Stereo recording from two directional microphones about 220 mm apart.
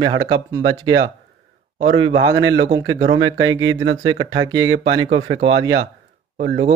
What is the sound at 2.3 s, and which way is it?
Speech, 15° right (ahead or behind).